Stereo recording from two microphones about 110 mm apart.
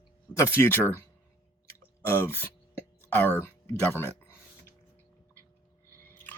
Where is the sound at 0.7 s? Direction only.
20° left (ahead or behind).